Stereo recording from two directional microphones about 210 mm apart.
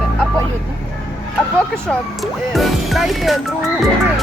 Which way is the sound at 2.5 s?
Centre (ahead or behind).